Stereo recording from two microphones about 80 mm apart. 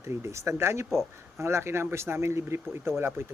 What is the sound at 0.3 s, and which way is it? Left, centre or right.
Speech, right.